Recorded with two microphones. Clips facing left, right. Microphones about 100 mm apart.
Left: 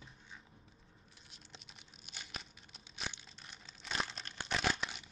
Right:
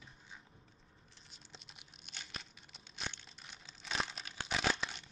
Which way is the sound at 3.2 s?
Centre (ahead or behind).